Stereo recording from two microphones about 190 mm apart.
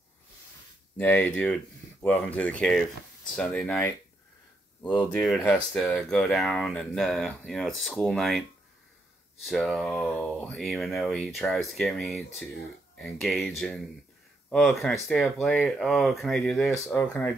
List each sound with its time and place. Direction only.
0.9 s speech: 10° left (ahead or behind)
4.8 s speech: 5° left (ahead or behind)